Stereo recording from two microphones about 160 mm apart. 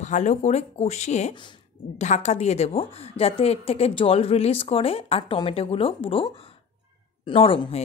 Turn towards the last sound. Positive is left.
turn(degrees=35)  # may be behind; listen again after turning